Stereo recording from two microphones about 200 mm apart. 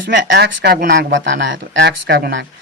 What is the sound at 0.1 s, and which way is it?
Speech, 60° right (ahead or behind).